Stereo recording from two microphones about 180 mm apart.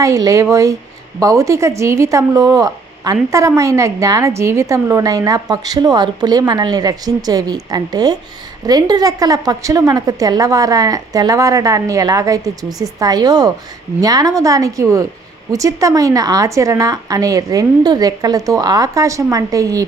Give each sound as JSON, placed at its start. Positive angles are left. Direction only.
{"t": 0.0, "sound": "a woman's voice", "side_deg": -20}